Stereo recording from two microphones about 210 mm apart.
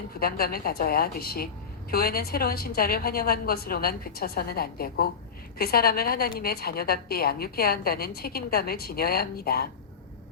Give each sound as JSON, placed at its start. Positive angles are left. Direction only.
{"t": 0.2, "sound": "a woman's voice", "side_deg": 45}